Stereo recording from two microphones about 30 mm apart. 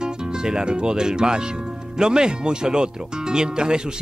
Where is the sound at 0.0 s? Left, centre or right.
Right.